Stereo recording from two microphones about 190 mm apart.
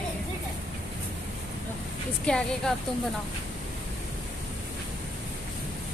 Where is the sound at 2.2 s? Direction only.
5° left (ahead or behind).